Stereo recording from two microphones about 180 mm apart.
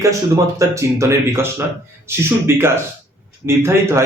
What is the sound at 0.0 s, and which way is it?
Speech, 15° right (ahead or behind).